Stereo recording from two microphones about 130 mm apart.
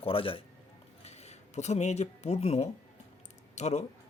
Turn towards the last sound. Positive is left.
turn(degrees=60)  # may be behind; listen again after turning